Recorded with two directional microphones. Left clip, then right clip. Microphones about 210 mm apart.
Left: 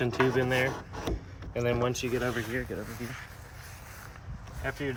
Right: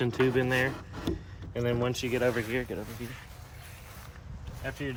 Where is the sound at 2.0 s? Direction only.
20° right (ahead or behind).